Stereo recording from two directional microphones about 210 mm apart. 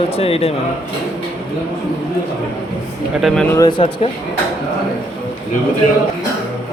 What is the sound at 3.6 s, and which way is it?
Speech, 20° left (ahead or behind).